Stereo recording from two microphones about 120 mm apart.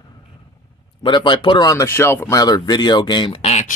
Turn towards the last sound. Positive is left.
turn(degrees=60)  # may be behind; listen again after turning